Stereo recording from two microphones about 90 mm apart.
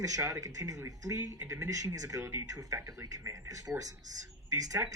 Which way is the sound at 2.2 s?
30° right (ahead or behind).